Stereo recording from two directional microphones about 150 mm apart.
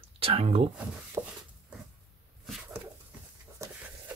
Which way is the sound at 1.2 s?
15° right (ahead or behind).